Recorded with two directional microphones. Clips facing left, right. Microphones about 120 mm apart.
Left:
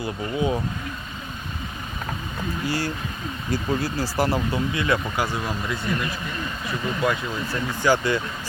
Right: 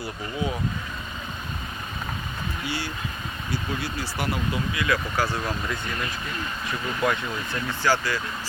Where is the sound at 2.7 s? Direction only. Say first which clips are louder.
Left 5 dB; 40° left (ahead or behind).